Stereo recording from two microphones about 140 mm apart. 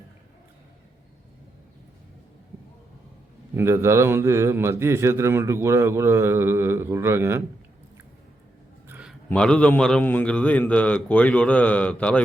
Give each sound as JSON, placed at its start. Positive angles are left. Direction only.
{"t": 3.5, "sound": "speech", "side_deg": -20}
{"t": 8.9, "sound": "a sound", "side_deg": -10}
{"t": 9.3, "sound": "a man's voice", "side_deg": 5}